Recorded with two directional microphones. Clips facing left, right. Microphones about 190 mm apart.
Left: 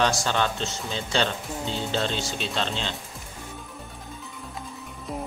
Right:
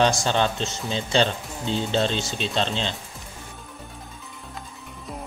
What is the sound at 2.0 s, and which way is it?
Speech, 25° right (ahead or behind).